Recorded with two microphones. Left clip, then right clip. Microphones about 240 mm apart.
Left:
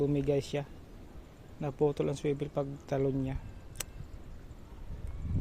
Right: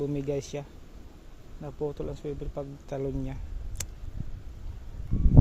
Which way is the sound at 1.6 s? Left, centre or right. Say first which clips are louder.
Left 4 dB; centre.